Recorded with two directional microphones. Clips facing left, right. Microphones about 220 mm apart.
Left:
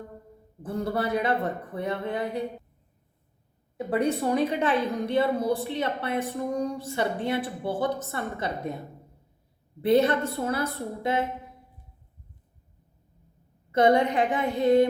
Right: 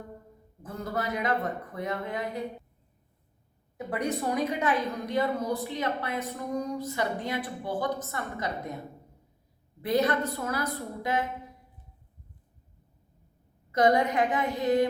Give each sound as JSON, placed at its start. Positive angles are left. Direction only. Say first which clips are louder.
{"t": 0.6, "sound": "speech", "louder": "left 5 dB", "side_deg": 30}
{"t": 3.8, "sound": "a woman's voice", "louder": "left 5 dB", "side_deg": 30}
{"t": 9.8, "sound": "a woman's voice", "louder": "left 5 dB", "side_deg": 25}
{"t": 13.7, "sound": "a woman's voice", "louder": "left 3 dB", "side_deg": 30}